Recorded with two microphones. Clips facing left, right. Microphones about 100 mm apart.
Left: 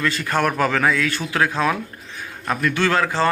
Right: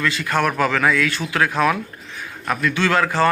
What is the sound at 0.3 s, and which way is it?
Speech, 30° left (ahead or behind).